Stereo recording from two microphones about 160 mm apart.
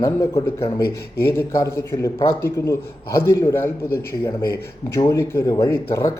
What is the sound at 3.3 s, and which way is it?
A man's voice, 15° left (ahead or behind).